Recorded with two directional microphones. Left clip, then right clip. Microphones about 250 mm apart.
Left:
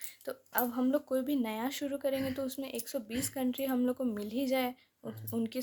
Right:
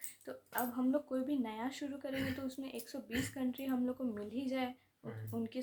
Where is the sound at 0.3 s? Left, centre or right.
Left.